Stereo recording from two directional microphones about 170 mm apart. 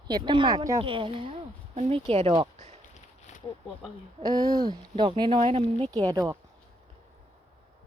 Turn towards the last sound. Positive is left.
turn(degrees=-20)  # may be behind; listen again after turning